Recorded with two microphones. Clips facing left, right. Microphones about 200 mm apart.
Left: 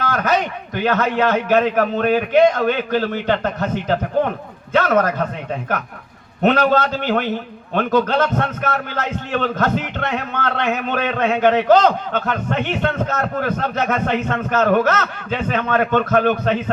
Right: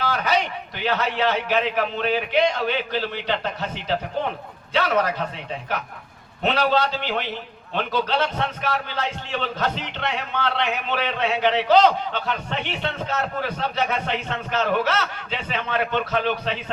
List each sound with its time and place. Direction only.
0.0 s a man's voice: 50° left (ahead or behind)
6.4 s a man's voice: 50° left (ahead or behind)